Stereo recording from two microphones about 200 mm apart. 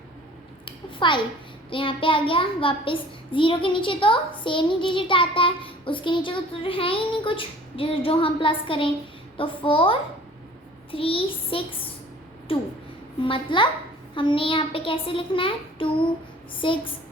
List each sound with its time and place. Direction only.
0.6 s a sound: 25° left (ahead or behind)
1.7 s a child's voice: 25° left (ahead or behind)
13.2 s a child's voice: 25° left (ahead or behind)